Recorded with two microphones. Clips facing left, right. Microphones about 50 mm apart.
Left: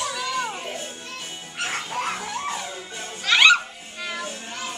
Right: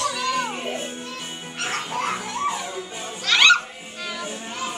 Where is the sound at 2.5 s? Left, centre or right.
Centre.